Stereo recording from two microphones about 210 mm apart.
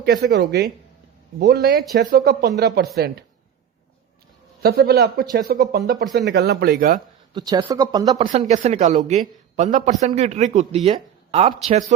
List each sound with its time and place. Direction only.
0.0 s speech: 50° right (ahead or behind)
4.6 s speech: 45° right (ahead or behind)
7.3 s speech: 20° right (ahead or behind)
8.3 s speech: 35° right (ahead or behind)